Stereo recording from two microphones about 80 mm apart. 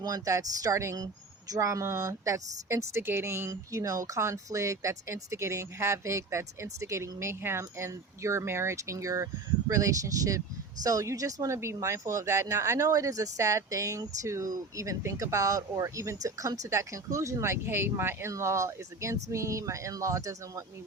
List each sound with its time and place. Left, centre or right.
0.0 s speech: right
0.9 s speech: right
3.5 s speech: right